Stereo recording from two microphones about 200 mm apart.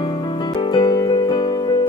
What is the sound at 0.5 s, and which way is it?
Music, 20° left (ahead or behind).